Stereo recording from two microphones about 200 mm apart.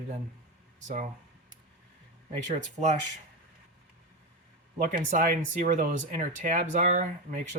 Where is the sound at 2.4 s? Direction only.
35° right (ahead or behind).